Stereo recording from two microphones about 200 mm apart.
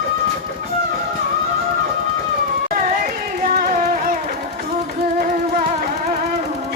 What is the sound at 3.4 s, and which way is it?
Carnatic music, 45° right (ahead or behind).